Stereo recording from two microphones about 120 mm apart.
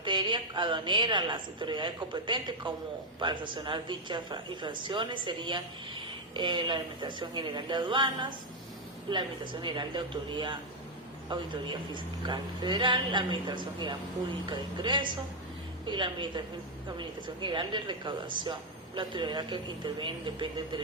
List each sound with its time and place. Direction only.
0.0 s speech: 40° right (ahead or behind)